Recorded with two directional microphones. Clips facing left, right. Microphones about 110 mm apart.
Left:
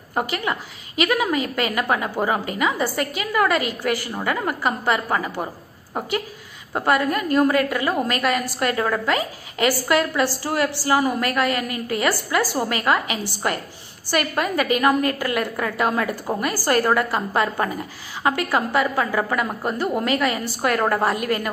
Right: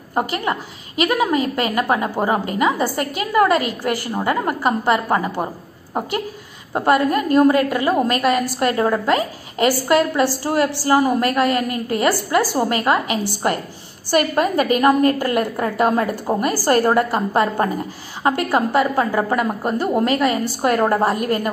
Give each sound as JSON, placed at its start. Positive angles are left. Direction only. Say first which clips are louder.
{"t": 0.3, "sound": "a woman's voice", "louder": "right 3 dB", "side_deg": -35}
{"t": 6.9, "sound": "a woman's voice", "louder": "right 4 dB", "side_deg": -35}